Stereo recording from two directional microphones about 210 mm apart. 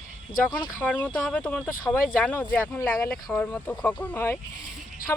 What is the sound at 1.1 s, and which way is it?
Speech, 5° left (ahead or behind).